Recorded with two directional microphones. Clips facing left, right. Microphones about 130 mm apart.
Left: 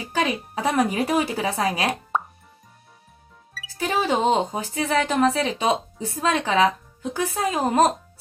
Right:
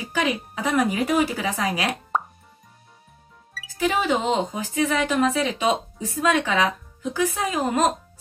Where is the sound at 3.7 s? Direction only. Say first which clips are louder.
Even; 30° left (ahead or behind).